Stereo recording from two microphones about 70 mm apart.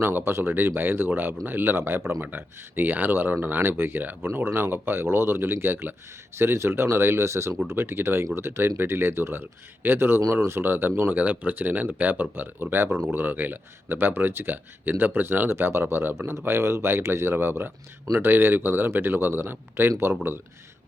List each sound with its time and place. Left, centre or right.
0.0 s speech: right